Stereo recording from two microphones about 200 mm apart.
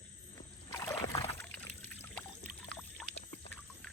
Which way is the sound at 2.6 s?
5° left (ahead or behind).